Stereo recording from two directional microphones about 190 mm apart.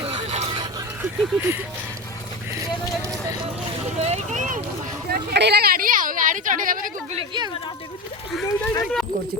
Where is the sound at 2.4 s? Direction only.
15° right (ahead or behind).